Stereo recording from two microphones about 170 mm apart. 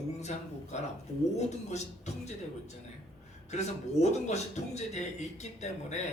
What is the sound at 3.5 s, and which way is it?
Speech, 40° left (ahead or behind).